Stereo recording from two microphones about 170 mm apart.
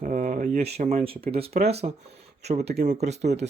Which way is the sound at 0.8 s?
40° right (ahead or behind).